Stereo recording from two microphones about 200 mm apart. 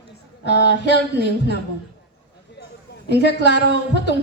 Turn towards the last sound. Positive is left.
turn(degrees=60)  # may be behind; listen again after turning